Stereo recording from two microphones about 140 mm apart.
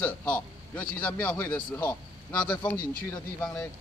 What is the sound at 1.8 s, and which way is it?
Speech, 30° left (ahead or behind).